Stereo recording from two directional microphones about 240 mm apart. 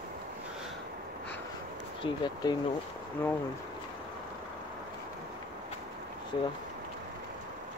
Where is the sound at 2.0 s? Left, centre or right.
Centre.